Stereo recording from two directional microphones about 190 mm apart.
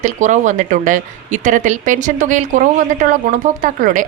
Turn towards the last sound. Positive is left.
turn(degrees=-45)  # may be behind; listen again after turning